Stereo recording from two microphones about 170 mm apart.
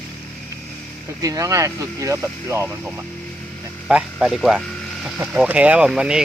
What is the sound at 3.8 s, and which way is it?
Speech, 5° right (ahead or behind).